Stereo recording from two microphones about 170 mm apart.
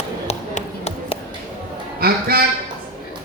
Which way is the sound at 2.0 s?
65° right (ahead or behind).